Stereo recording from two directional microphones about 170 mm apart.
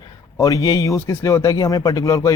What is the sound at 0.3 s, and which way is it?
A man's voice, 20° left (ahead or behind).